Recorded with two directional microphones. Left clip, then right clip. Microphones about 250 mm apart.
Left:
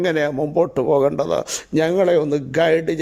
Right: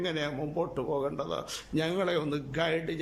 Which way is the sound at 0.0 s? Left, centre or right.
Left.